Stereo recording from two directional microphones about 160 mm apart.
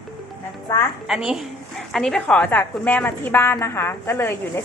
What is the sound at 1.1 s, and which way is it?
A woman's voice, 5° right (ahead or behind).